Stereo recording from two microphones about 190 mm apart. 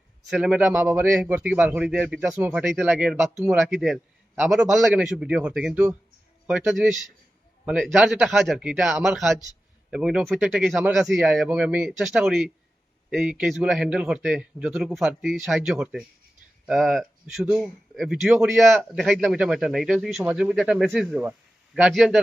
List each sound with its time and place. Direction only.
0.3 s a man's voice: centre (ahead or behind)